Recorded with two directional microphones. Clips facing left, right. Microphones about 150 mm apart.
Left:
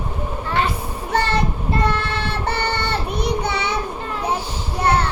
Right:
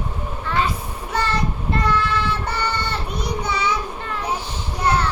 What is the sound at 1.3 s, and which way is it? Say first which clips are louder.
Child singing: left 2 dB; 25° left (ahead or behind).